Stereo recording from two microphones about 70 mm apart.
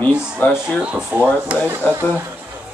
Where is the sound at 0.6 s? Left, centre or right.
Centre.